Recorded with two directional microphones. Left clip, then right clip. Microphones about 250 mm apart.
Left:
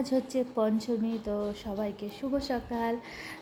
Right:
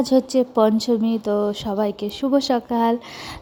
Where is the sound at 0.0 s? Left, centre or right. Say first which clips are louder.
Right 11 dB; right.